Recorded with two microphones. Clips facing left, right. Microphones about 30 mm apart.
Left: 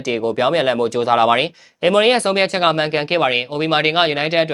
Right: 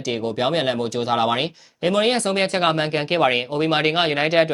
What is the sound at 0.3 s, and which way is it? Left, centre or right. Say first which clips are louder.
Speech: left 5 dB; centre.